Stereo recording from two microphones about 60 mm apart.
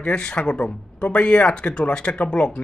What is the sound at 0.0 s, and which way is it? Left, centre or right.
Speech, centre.